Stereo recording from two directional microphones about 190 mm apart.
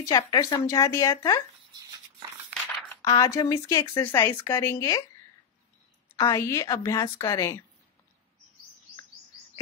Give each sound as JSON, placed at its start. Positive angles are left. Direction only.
{"t": 0.0, "sound": "speech", "side_deg": 20}
{"t": 1.7, "sound": "a sound", "side_deg": -20}
{"t": 3.0, "sound": "speech", "side_deg": 15}
{"t": 6.1, "sound": "speech", "side_deg": 15}